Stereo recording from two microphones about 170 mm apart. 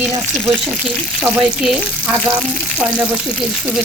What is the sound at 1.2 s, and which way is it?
Frying, 5° right (ahead or behind).